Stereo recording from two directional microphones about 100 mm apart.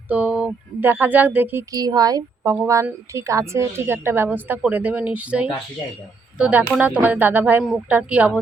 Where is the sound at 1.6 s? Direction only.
40° right (ahead or behind).